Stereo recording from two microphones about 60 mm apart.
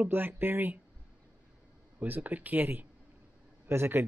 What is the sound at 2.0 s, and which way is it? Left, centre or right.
Speech, right.